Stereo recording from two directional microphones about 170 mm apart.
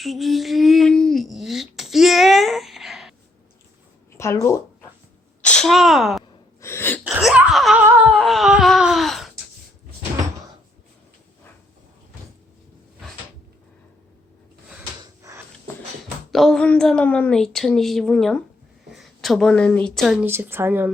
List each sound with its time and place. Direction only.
0.0 s a sound: centre (ahead or behind)
4.2 s speech: 15° left (ahead or behind)
5.4 s speech: 5° left (ahead or behind)
6.6 s gasp: 15° left (ahead or behind)
7.0 s laughter: 5° right (ahead or behind)
8.1 s a sound: centre (ahead or behind)
16.3 s a woman's voice: centre (ahead or behind)
20.2 s a woman's voice: 15° right (ahead or behind)